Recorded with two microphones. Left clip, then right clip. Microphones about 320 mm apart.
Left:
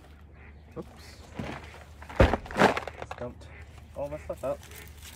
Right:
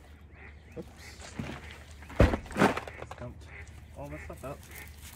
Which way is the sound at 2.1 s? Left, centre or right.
Left.